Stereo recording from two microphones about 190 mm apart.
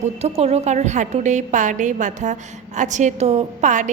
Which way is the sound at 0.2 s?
35° right (ahead or behind).